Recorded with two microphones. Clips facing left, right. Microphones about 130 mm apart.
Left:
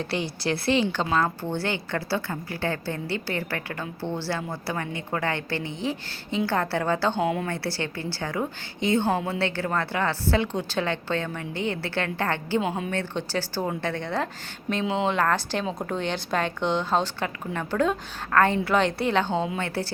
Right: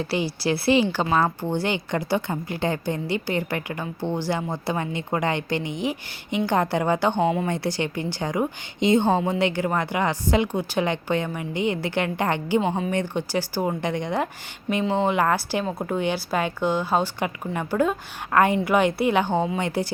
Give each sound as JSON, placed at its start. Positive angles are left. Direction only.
{"t": 0.0, "sound": "a woman's voice", "side_deg": -5}
{"t": 7.2, "sound": "a woman's voice", "side_deg": 0}
{"t": 7.4, "sound": "a woman's voice", "side_deg": -20}
{"t": 12.6, "sound": "a woman's voice", "side_deg": 5}
{"t": 12.9, "sound": "a woman's voice", "side_deg": -15}
{"t": 14.7, "sound": "a woman's voice", "side_deg": 0}
{"t": 15.0, "sound": "a woman's voice", "side_deg": -10}